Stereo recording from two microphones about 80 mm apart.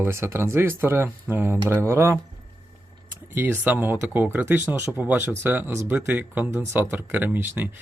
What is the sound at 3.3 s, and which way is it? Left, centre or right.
Speech, right.